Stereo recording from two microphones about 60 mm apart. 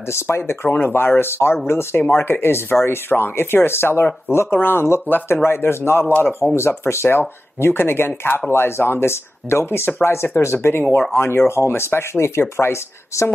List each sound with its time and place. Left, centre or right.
0.3 s speech: left
13.1 s speech: left